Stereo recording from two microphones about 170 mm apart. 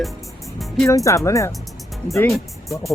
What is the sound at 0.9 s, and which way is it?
Speech, 20° left (ahead or behind).